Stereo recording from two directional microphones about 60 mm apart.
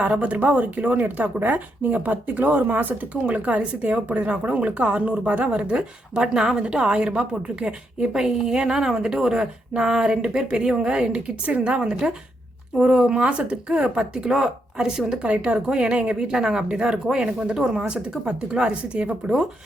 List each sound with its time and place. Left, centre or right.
0.0 s a woman's voice: right
15.3 s a woman's voice: right